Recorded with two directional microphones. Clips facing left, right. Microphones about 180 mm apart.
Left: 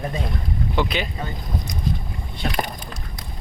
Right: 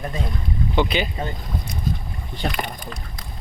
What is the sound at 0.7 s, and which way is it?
Speech, centre (ahead or behind).